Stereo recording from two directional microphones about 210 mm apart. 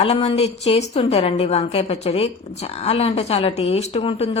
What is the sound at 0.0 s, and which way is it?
A woman's voice, 30° left (ahead or behind).